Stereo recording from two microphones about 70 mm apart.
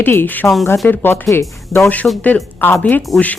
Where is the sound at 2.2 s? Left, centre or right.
Left.